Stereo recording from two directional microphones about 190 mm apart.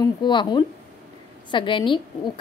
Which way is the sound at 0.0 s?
25° left (ahead or behind).